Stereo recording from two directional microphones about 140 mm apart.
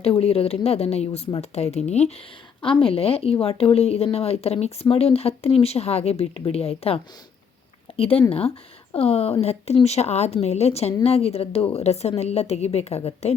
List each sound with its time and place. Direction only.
0.0 s speech: 45° left (ahead or behind)
2.6 s speech: 40° left (ahead or behind)